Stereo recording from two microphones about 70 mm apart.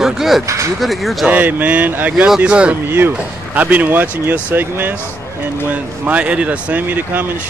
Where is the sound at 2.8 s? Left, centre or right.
Right.